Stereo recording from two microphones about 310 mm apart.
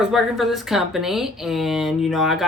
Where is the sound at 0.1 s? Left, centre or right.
Centre.